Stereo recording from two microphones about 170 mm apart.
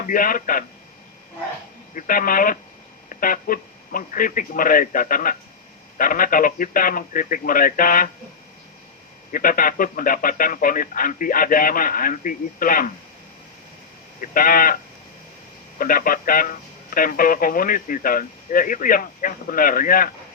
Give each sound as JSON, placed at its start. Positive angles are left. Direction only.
{"t": 0.0, "sound": "a man's voice", "side_deg": 55}
{"t": 2.0, "sound": "a man's voice", "side_deg": 55}
{"t": 9.3, "sound": "a man's voice", "side_deg": 55}
{"t": 14.2, "sound": "a man's voice", "side_deg": 55}
{"t": 15.8, "sound": "a man's voice", "side_deg": 60}